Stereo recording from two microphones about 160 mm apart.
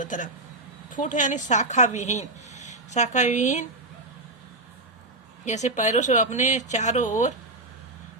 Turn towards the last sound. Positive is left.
turn(degrees=50)  # may be behind; listen again after turning